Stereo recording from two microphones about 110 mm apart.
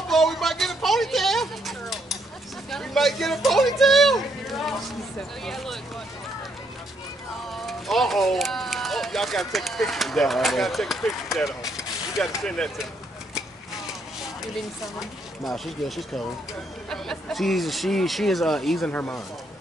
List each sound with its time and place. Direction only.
0.1 s a sound: centre (ahead or behind)
5.4 s speech: centre (ahead or behind)
7.6 s speech: centre (ahead or behind)
12.4 s speech: 5° left (ahead or behind)
15.0 s speech: centre (ahead or behind)
18.9 s speech: 15° left (ahead or behind)